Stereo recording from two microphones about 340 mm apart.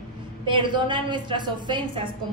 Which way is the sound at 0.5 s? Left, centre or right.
Centre.